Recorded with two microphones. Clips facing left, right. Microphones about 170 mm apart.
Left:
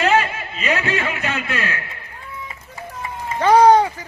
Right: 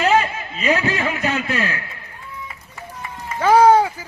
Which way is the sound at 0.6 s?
35° right (ahead or behind).